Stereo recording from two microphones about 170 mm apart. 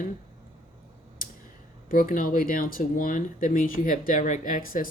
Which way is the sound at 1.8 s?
55° left (ahead or behind).